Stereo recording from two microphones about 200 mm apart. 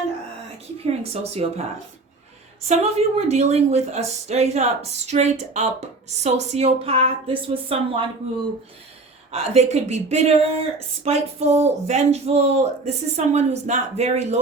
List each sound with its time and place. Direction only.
0.8 s speech: 30° right (ahead or behind)
2.6 s a woman's voice: 35° right (ahead or behind)
9.3 s speech: 30° right (ahead or behind)